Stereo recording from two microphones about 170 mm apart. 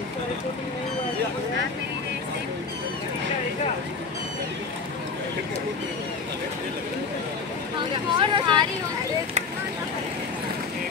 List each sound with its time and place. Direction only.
7.9 s speech: 30° right (ahead or behind)